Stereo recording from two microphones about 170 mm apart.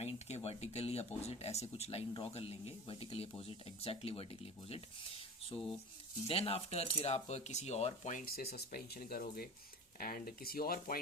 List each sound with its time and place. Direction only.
0.0 s speech: 40° left (ahead or behind)
8.2 s speech: 65° left (ahead or behind)